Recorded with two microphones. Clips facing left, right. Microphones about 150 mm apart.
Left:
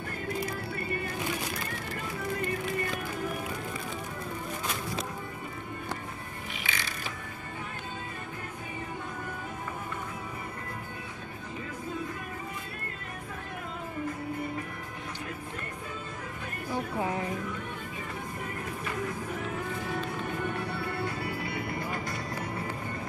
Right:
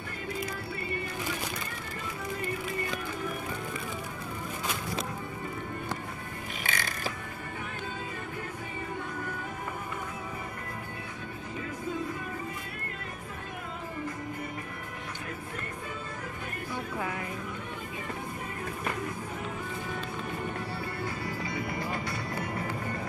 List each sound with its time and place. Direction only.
6.7 s mechanisms: 45° right (ahead or behind)
21.0 s music: 65° left (ahead or behind)